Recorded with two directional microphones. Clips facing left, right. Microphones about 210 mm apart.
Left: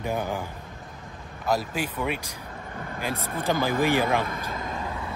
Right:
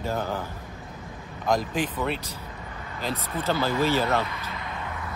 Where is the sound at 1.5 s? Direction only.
10° left (ahead or behind).